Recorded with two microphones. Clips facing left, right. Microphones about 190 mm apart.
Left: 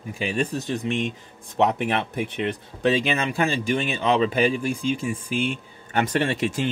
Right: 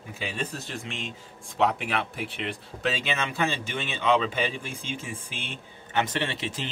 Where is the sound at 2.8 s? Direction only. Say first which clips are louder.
Left 7 dB; 15° left (ahead or behind).